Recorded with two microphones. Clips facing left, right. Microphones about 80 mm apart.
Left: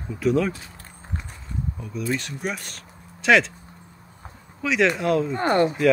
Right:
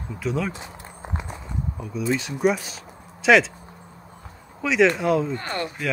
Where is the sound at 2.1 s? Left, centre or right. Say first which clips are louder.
Right 8 dB; centre.